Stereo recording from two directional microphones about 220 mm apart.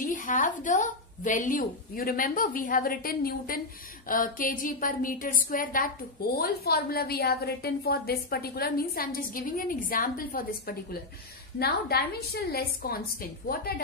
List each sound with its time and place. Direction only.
0.0 s a woman's voice: 35° left (ahead or behind)